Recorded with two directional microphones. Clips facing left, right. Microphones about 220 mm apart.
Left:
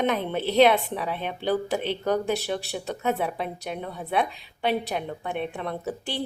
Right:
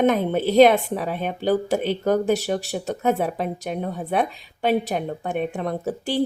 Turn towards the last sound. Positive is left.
turn(degrees=-45)  # may be behind; listen again after turning